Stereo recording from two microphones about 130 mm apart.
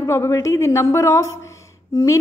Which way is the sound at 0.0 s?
20° left (ahead or behind).